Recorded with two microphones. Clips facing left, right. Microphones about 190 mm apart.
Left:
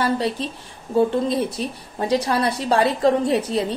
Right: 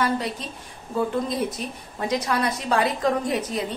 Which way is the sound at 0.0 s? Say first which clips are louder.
Left 3 dB; 30° left (ahead or behind).